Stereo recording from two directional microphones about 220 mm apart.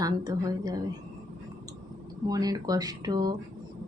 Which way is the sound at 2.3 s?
15° right (ahead or behind).